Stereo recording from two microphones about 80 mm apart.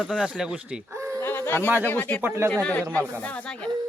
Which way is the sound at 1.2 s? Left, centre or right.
Left.